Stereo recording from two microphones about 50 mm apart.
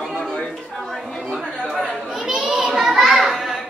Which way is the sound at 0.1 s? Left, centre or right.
Centre.